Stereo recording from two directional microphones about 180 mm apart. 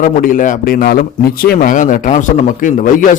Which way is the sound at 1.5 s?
45° left (ahead or behind).